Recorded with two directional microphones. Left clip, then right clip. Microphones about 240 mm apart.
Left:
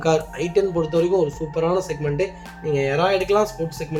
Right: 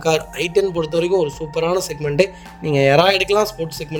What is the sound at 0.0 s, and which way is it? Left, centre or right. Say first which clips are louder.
Speech: right 2 dB; right.